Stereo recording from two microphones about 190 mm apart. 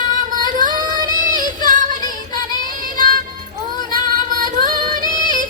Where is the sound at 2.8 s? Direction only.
45° right (ahead or behind).